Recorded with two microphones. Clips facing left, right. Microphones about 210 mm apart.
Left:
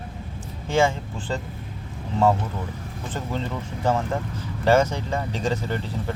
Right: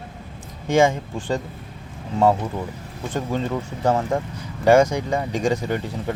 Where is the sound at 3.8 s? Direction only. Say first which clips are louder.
Right 3 dB; 15° right (ahead or behind).